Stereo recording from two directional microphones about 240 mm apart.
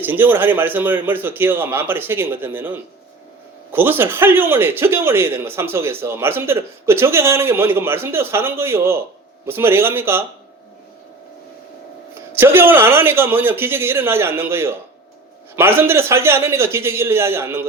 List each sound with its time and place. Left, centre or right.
0.0 s a man's voice: centre
12.4 s a man's voice: centre